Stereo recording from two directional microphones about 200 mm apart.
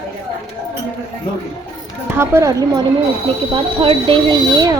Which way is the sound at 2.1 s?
10° right (ahead or behind).